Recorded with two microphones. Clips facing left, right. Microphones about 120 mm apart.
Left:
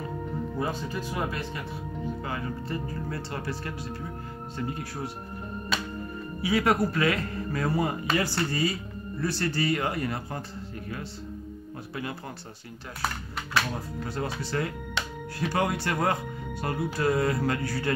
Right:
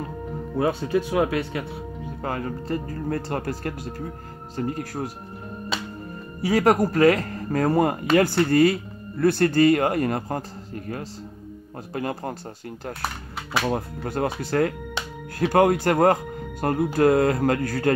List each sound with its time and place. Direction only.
0.6 s speech: 70° right (ahead or behind)
2.2 s speech: 45° right (ahead or behind)
6.4 s speech: 40° right (ahead or behind)
13.7 s speech: 55° right (ahead or behind)